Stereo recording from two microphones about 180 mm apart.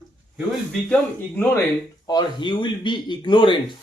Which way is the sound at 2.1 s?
25° left (ahead or behind).